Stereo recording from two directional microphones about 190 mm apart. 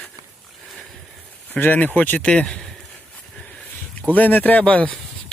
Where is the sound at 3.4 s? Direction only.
5° left (ahead or behind).